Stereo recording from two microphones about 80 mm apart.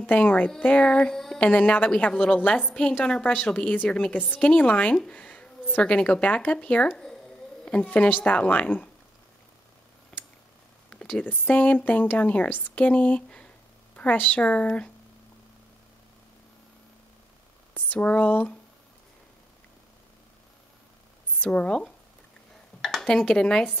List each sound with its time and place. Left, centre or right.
0.0 s a woman's voice: centre
1.4 s a woman's voice: centre
10.1 s a sound: centre
11.2 s a woman's voice: centre
17.7 s speech: left
21.4 s a woman's voice: centre